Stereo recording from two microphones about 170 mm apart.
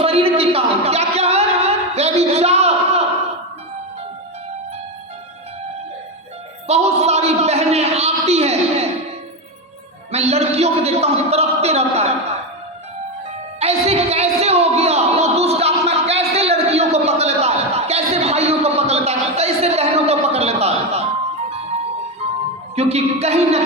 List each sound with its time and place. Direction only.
0.0 s music: 35° right (ahead or behind)
6.7 s a man's voice: 40° right (ahead or behind)
10.1 s a man's voice: 40° right (ahead or behind)
13.6 s a sound: 40° right (ahead or behind)
22.7 s a man's voice: 40° right (ahead or behind)